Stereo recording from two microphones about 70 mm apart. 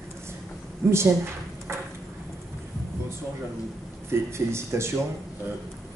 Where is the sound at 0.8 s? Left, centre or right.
Right.